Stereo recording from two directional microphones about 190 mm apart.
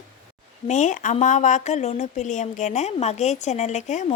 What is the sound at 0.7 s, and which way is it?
Speech, 40° left (ahead or behind).